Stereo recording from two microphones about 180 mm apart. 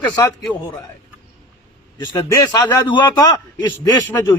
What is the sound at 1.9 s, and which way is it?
Speech, 25° left (ahead or behind).